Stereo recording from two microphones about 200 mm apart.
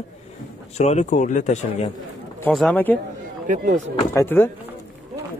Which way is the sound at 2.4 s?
5° left (ahead or behind).